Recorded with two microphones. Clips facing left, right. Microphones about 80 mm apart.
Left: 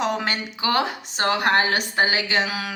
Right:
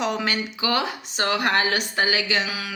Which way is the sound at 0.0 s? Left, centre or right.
Left.